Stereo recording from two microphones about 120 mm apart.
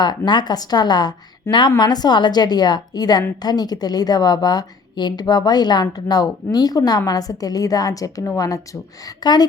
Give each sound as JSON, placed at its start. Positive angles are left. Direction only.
{"t": 0.3, "sound": "a woman's voice", "side_deg": 35}